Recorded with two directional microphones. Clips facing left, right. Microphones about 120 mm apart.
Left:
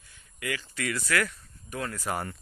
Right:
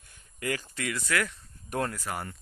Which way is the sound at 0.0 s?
40° right (ahead or behind).